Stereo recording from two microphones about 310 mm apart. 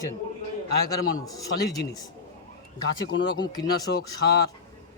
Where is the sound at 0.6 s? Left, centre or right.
Left.